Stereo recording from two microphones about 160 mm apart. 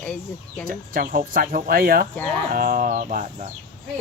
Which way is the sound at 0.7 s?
60° right (ahead or behind).